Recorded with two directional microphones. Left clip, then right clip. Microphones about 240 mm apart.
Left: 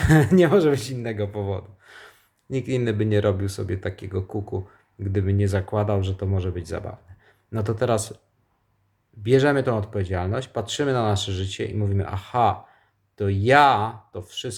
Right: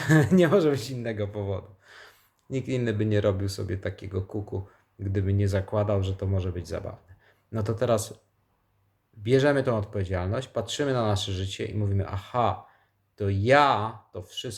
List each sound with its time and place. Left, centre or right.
0.0 s speech: centre
9.2 s speech: centre